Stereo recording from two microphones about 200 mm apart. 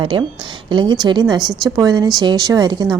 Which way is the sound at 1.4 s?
Centre (ahead or behind).